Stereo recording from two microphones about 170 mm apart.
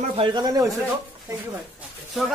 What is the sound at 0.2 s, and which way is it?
Speech, 25° right (ahead or behind).